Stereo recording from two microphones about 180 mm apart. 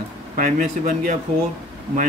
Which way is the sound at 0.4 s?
50° right (ahead or behind).